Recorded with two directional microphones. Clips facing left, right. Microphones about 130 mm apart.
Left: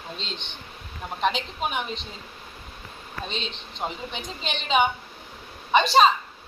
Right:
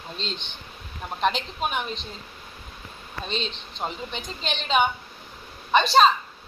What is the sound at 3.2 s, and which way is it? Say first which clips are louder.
A woman's voice: right 3 dB; 5° left (ahead or behind).